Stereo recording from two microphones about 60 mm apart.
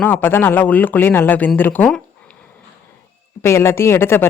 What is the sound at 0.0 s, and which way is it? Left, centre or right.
Speech, left.